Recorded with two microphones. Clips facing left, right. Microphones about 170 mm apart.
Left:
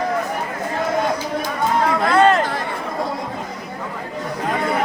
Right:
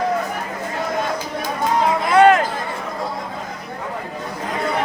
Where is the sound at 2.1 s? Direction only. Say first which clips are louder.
Right 3 dB; 15° right (ahead or behind).